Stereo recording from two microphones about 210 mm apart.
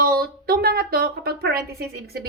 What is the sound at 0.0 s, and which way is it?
A woman's voice, 45° right (ahead or behind).